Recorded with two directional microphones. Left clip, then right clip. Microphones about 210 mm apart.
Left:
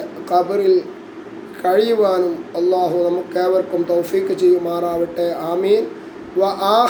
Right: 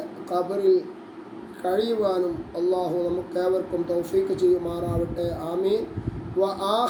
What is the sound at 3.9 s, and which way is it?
Speech, 5° right (ahead or behind).